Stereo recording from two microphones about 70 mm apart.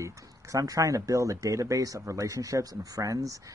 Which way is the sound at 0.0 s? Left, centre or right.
Right.